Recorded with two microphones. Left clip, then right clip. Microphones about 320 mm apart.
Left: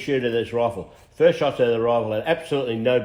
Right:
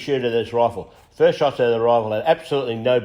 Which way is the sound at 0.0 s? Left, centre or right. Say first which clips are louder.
Right 2 dB; right.